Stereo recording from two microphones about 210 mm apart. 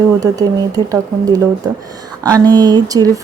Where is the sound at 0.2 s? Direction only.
15° right (ahead or behind).